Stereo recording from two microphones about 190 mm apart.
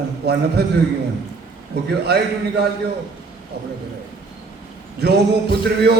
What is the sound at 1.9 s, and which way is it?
Speech, 60° right (ahead or behind).